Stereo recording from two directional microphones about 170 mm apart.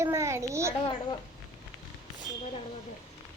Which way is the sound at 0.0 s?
15° right (ahead or behind).